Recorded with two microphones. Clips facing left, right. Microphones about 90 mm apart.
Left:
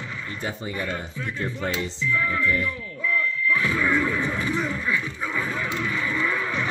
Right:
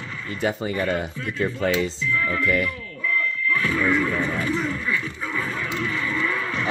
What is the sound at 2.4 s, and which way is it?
Speech, 90° right.